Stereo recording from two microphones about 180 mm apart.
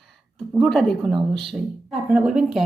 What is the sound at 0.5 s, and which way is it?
Speech, centre (ahead or behind).